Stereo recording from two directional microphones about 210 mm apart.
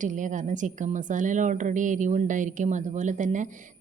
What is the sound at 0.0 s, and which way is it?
Speech, 35° right (ahead or behind).